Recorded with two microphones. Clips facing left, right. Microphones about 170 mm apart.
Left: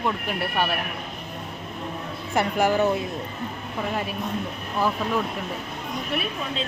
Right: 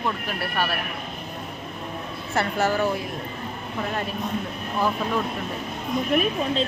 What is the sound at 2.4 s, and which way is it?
Speech, 15° left (ahead or behind).